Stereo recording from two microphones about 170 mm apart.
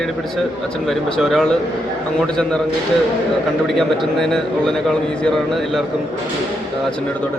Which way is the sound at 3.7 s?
Centre (ahead or behind).